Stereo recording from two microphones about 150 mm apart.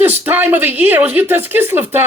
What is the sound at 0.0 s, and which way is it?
Speech, 15° right (ahead or behind).